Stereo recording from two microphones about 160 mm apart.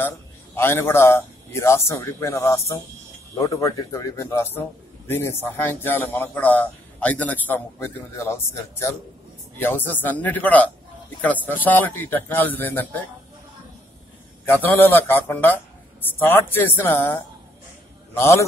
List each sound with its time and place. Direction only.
0.6 s a man's voice: 15° left (ahead or behind)
9.6 s a man's voice: 10° left (ahead or behind)
14.4 s a man's voice: 15° left (ahead or behind)